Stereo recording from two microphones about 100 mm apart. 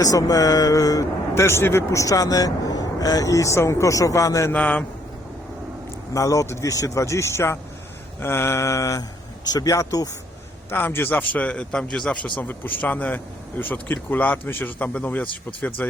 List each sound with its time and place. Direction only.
0.0 s speech: 35° left (ahead or behind)
4.5 s speech: 15° left (ahead or behind)
6.1 s speech: 35° left (ahead or behind)
10.7 s speech: 20° left (ahead or behind)